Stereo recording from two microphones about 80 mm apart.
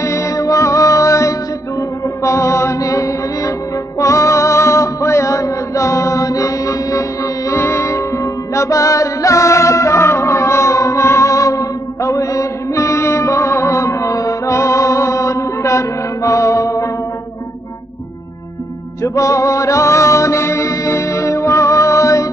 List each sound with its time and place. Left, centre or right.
0.0 s music: left
19.0 s music: left